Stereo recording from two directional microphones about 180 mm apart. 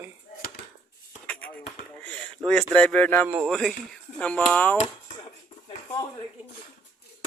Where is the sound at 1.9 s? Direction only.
5° left (ahead or behind).